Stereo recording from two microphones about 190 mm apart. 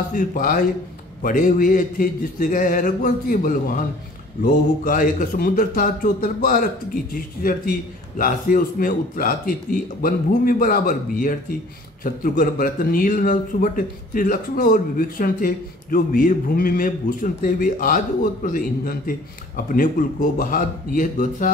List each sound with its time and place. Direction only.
0.1 s speech: 50° left (ahead or behind)